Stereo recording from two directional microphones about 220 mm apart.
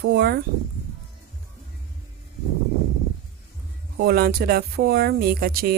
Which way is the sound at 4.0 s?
45° right (ahead or behind).